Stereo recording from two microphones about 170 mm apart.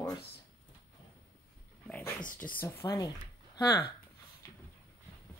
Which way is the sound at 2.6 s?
20° left (ahead or behind).